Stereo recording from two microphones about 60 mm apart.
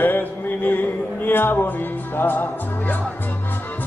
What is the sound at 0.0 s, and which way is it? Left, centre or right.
Music, left.